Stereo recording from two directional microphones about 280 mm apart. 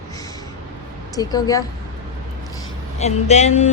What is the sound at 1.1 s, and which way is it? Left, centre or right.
Speech, centre.